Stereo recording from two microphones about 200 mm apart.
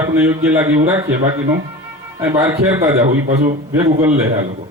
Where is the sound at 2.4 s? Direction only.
15° right (ahead or behind).